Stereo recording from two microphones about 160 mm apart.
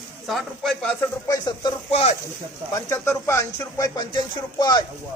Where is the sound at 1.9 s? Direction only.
40° left (ahead or behind).